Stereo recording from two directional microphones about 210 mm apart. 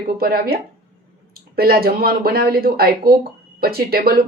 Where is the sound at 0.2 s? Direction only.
45° right (ahead or behind).